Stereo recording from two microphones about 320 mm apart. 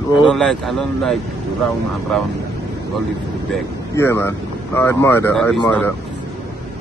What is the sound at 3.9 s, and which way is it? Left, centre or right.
Speech, centre.